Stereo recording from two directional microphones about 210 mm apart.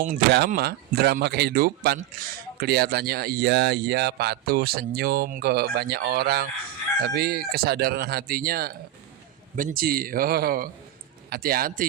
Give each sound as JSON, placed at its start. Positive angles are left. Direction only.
{"t": 0.0, "sound": "speech", "side_deg": -45}